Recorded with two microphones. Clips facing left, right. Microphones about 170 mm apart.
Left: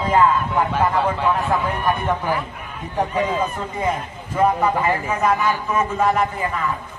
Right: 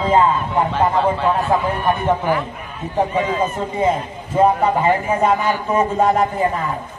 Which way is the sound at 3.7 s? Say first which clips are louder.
Right 6 dB; 25° right (ahead or behind).